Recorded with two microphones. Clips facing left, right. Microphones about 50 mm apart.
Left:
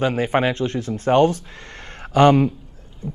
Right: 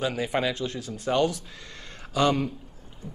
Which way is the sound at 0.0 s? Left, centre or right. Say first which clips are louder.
Left 7 dB; left.